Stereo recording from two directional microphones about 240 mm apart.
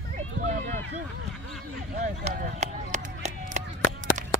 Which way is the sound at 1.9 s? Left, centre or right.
Right.